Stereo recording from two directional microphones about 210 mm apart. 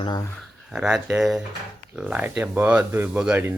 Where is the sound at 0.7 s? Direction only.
Centre (ahead or behind).